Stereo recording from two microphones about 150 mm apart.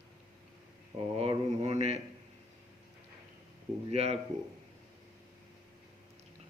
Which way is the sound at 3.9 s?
45° right (ahead or behind).